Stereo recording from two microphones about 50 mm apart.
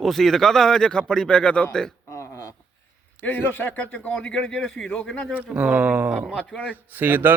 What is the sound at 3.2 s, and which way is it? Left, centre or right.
A man's voice, left.